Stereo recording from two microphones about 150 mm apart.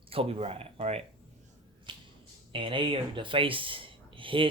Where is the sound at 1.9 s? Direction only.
30° right (ahead or behind).